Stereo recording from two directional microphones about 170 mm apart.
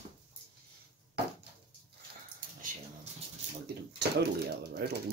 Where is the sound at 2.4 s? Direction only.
55° right (ahead or behind).